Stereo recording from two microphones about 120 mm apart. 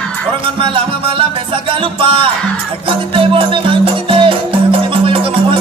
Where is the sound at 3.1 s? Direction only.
45° right (ahead or behind).